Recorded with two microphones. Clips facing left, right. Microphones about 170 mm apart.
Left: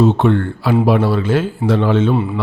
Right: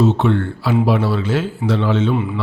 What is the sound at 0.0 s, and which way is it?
A man's voice, 50° left (ahead or behind).